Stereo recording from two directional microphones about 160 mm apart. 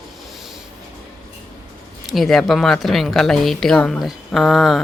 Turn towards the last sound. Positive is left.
turn(degrees=0)  # may be behind; listen again after turning